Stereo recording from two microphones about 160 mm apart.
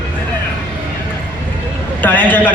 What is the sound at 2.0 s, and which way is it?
Speech, 10° left (ahead or behind).